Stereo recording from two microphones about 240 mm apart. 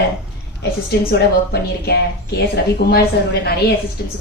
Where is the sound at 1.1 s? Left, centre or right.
Left.